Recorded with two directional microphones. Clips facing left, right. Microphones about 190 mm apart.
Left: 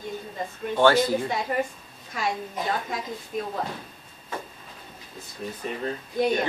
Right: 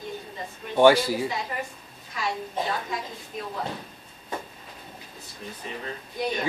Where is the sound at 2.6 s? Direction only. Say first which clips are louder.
Right 1 dB; 30° right (ahead or behind).